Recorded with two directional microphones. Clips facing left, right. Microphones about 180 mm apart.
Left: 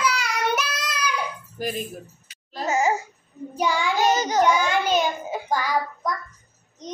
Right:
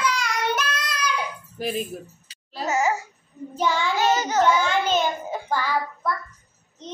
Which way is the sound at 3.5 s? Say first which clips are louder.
Even; 10° left (ahead or behind).